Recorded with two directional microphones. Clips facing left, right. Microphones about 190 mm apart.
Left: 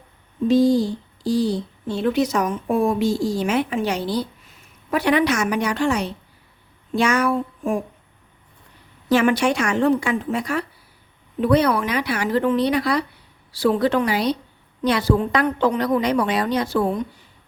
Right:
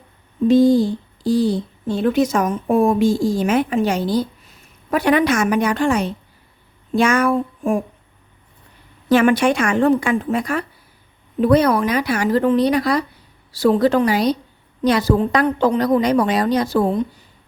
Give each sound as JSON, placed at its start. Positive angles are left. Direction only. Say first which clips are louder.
{"t": 0.4, "sound": "speech", "louder": "right 3 dB", "side_deg": -55}
{"t": 9.0, "sound": "a woman's voice", "louder": "right 3 dB", "side_deg": -55}